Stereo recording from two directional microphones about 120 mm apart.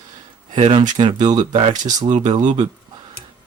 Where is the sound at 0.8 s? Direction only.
40° right (ahead or behind).